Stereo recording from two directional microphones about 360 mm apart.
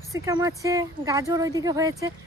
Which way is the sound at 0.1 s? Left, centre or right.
Centre.